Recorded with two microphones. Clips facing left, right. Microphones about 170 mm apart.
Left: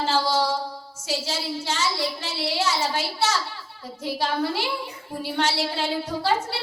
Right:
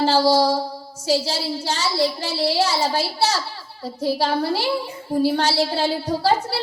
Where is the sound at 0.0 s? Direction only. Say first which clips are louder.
Right 6 dB; 35° right (ahead or behind).